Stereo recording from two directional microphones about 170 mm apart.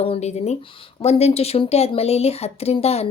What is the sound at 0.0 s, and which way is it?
Speech, 40° left (ahead or behind).